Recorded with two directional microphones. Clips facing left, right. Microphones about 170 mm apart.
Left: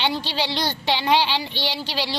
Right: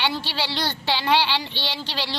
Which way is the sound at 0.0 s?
15° left (ahead or behind).